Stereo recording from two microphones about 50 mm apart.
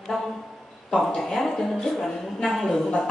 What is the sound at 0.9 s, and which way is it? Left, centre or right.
A woman's voice, centre.